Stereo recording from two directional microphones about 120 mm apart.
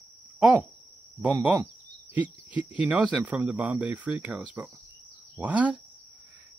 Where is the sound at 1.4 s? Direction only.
15° right (ahead or behind).